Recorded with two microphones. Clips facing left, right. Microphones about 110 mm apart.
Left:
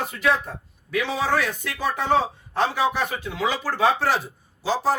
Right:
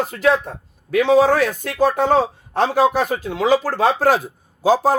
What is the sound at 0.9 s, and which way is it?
Speech, 50° right (ahead or behind).